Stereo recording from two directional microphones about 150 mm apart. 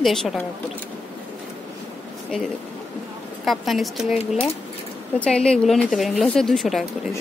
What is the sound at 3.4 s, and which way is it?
Speech, centre (ahead or behind).